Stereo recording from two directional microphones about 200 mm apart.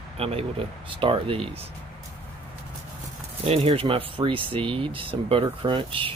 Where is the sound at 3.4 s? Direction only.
30° right (ahead or behind).